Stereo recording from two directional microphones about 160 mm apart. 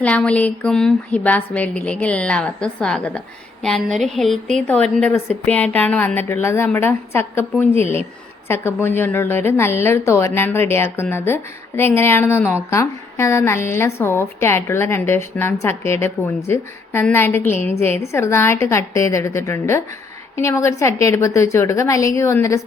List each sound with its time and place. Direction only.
0.0 s a woman's voice: 5° left (ahead or behind)
8.4 s a woman's voice: 15° left (ahead or behind)